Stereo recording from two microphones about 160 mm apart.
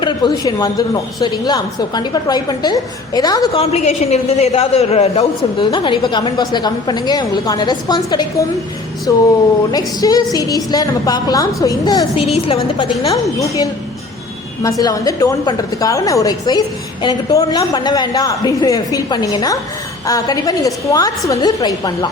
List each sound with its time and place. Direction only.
0.0 s a woman's voice: 25° left (ahead or behind)
3.5 s a woman's voice: 40° left (ahead or behind); by 12.0 s 20° left (ahead or behind)
12.1 s a woman's voice: 35° left (ahead or behind)
14.6 s a woman's voice: 20° left (ahead or behind)